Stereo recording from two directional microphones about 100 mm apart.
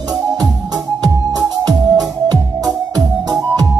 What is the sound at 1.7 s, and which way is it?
Music, 40° right (ahead or behind).